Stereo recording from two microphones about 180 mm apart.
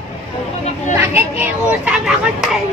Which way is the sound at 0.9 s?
10° right (ahead or behind).